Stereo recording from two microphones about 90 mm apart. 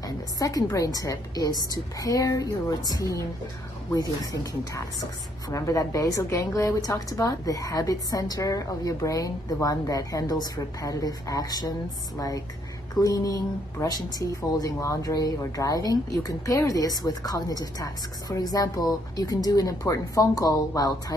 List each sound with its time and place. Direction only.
0.0 s a woman's voice: 45° left (ahead or behind)
4.2 s a woman's voice: 40° left (ahead or behind)